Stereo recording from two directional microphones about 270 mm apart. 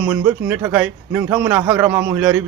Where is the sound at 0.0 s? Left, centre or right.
Centre.